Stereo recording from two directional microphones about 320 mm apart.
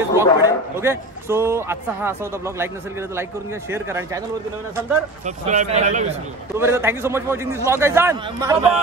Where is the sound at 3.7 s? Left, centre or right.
Centre.